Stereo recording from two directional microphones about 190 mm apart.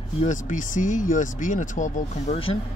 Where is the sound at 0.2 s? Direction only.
40° left (ahead or behind).